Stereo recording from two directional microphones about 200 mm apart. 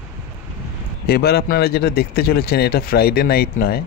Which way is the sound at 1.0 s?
50° left (ahead or behind).